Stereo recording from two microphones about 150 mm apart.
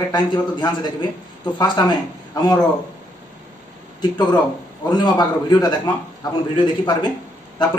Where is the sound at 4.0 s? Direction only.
30° left (ahead or behind).